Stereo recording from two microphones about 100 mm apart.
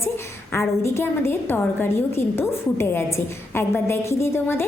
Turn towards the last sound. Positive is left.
turn(degrees=25)  # may be behind; listen again after turning